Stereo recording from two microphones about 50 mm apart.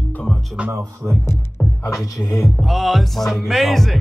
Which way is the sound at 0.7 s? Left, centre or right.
Right.